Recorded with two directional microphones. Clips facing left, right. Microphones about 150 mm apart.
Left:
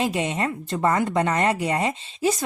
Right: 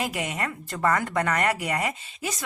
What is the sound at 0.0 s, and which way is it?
Speech, 25° left (ahead or behind).